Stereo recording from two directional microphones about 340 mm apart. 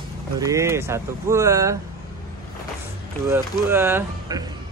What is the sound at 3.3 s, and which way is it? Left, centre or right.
Speech, centre.